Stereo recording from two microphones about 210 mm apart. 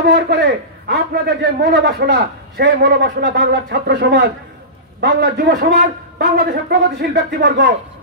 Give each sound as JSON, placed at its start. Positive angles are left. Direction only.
{"t": 0.0, "sound": "a man's voice", "side_deg": -50}